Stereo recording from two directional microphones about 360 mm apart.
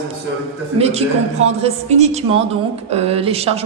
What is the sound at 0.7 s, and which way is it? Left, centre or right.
A woman's voice, centre.